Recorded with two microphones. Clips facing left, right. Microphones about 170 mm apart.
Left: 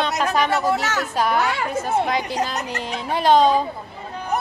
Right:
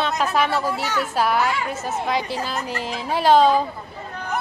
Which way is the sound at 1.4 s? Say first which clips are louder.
Even; 65° left (ahead or behind).